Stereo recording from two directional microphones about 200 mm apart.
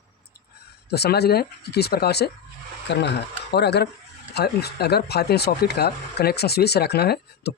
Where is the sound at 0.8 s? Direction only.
55° left (ahead or behind).